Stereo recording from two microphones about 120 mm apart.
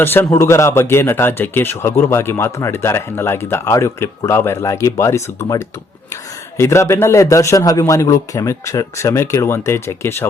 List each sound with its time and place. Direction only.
0.0 s speech: 20° left (ahead or behind)